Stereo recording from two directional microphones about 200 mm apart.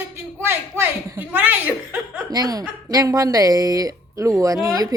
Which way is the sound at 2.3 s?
20° right (ahead or behind).